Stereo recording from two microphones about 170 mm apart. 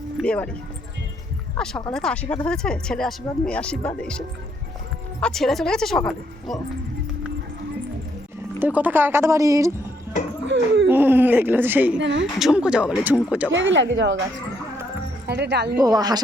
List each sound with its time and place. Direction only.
0.2 s speech: 5° left (ahead or behind)
1.5 s speech: 5° left (ahead or behind)
5.2 s speech: centre (ahead or behind)
8.5 s speech: 10° right (ahead or behind)
10.5 s speech: 90° right
10.8 s speech: 10° right (ahead or behind)
11.9 s speech: 90° right
12.4 s speech: 5° right (ahead or behind)
13.5 s speech: 90° right
15.3 s speech: 80° right
15.8 s speech: 20° right (ahead or behind)